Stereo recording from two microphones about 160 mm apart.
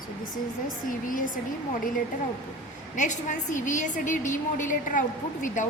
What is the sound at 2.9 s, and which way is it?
A woman's voice, 50° left (ahead or behind).